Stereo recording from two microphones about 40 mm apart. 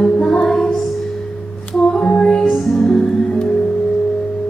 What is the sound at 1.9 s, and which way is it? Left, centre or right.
Music, left.